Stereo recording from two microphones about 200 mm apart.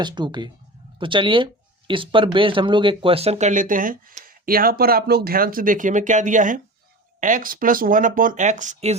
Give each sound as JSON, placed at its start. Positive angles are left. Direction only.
{"t": 0.0, "sound": "speech", "side_deg": -20}